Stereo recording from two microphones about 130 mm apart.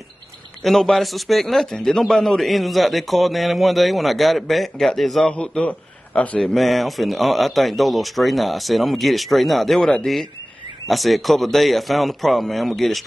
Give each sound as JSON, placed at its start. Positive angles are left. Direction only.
{"t": 0.7, "sound": "a man's voice", "side_deg": 0}